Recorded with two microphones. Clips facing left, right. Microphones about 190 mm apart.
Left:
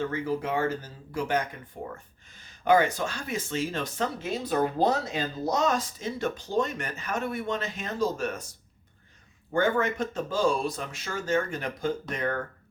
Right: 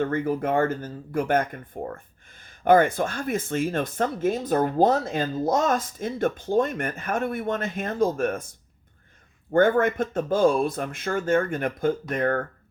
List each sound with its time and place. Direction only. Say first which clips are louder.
0.0 s speech: right 5 dB; 55° right (ahead or behind)